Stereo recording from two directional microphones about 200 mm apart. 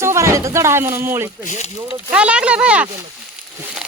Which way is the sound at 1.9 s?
5° right (ahead or behind).